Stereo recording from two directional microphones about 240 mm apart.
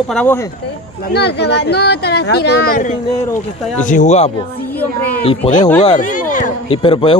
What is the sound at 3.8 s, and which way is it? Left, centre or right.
Speech, left.